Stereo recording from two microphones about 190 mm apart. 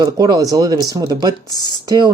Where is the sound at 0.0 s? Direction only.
20° right (ahead or behind).